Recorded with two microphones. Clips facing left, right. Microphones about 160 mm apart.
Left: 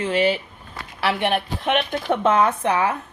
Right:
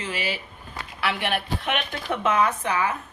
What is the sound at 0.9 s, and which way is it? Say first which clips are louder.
Speech: left 5 dB; 30° left (ahead or behind).